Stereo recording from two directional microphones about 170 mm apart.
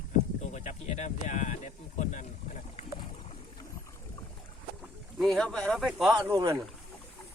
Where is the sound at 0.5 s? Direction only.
45° left (ahead or behind).